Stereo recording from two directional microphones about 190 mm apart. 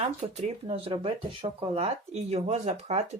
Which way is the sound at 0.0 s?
30° right (ahead or behind).